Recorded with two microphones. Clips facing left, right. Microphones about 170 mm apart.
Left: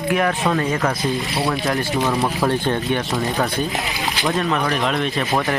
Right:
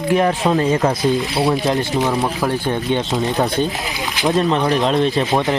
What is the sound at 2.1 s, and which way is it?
Speech, centre (ahead or behind).